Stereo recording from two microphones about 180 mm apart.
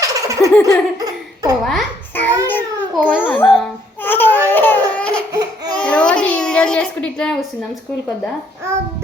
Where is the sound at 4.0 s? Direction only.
10° left (ahead or behind).